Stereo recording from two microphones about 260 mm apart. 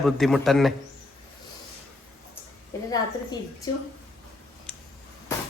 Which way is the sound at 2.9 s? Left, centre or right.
Centre.